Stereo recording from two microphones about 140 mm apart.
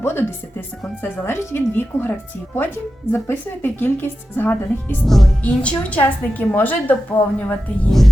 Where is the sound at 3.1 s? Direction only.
15° left (ahead or behind).